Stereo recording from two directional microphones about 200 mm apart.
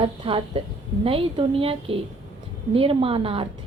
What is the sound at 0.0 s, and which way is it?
A woman's voice, 25° right (ahead or behind).